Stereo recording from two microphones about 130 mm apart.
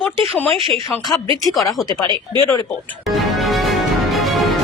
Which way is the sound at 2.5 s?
20° left (ahead or behind).